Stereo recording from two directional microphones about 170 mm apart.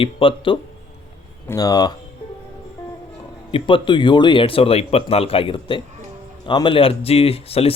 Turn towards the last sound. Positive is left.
turn(degrees=35)  # may be behind; listen again after turning